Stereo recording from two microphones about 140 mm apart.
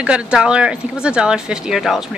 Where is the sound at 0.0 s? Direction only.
5° right (ahead or behind).